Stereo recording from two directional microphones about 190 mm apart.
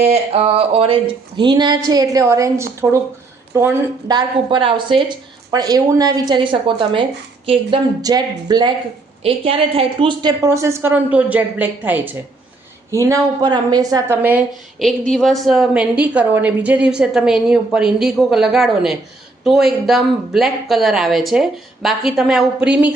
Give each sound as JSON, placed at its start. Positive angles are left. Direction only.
{"t": 0.1, "sound": "a woman's voice", "side_deg": -30}
{"t": 4.1, "sound": "a woman's voice", "side_deg": -25}
{"t": 14.2, "sound": "a woman's voice", "side_deg": -10}
{"t": 14.8, "sound": "a woman's voice", "side_deg": 0}